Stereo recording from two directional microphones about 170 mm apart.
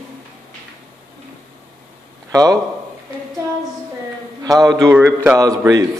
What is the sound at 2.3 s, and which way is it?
Speech, 20° right (ahead or behind).